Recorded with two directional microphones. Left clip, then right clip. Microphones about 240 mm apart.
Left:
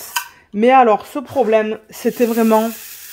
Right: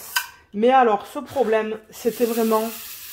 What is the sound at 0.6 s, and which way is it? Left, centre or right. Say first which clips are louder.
Speech: left 5 dB; left.